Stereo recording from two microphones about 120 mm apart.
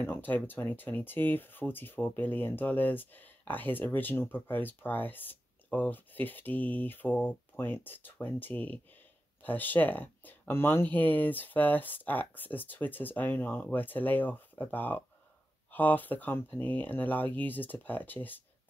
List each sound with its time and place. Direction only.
0.0 s speech: 15° left (ahead or behind)